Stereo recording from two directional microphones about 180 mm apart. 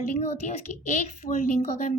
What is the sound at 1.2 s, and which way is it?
Speech, 40° left (ahead or behind).